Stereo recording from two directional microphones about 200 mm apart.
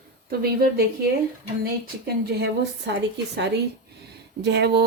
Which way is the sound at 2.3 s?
55° right (ahead or behind).